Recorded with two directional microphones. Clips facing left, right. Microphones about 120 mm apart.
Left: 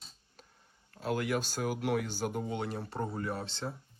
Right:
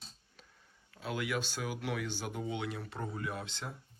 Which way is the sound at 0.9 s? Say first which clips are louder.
Left 4 dB; 45° left (ahead or behind).